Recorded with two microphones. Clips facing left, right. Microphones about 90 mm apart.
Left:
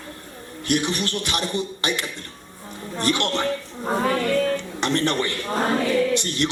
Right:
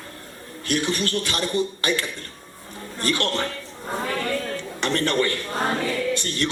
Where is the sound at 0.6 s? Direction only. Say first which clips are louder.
Left 1 dB; 20° left (ahead or behind).